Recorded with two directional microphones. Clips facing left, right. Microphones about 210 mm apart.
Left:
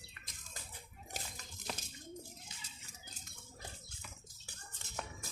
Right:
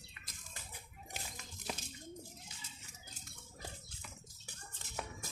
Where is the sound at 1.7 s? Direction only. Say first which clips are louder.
Right 1 dB; 5° right (ahead or behind).